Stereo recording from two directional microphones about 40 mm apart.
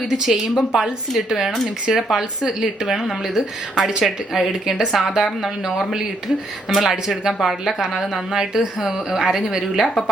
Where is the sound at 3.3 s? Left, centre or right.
Centre.